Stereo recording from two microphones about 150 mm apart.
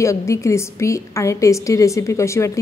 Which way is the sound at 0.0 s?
20° left (ahead or behind).